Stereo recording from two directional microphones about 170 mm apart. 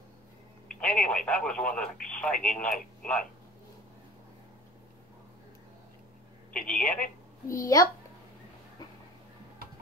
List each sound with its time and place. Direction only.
0.7 s speech: 5° left (ahead or behind)
6.7 s a woman's voice: 5° left (ahead or behind)
7.4 s a child's voice: 20° left (ahead or behind)